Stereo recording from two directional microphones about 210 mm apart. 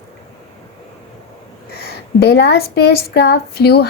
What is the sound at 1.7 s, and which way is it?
Speech, 50° left (ahead or behind).